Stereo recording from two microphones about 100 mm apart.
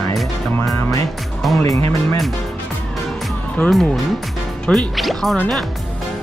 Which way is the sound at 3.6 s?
10° left (ahead or behind).